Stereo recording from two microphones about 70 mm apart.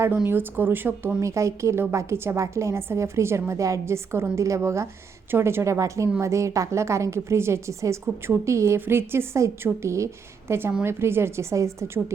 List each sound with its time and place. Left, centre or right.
0.3 s speech: right
1.2 s a woman's voice: right